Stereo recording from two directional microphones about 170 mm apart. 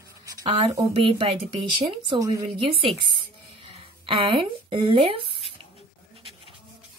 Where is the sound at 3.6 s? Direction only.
30° right (ahead or behind).